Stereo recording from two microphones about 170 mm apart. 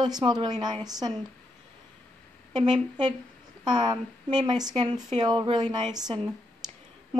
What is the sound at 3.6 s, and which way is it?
Speech, 25° right (ahead or behind).